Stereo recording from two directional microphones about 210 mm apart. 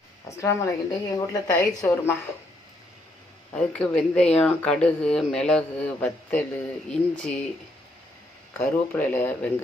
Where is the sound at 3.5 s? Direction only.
5° left (ahead or behind).